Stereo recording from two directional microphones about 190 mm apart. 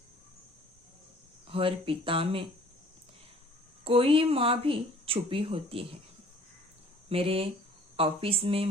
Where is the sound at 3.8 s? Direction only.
30° right (ahead or behind).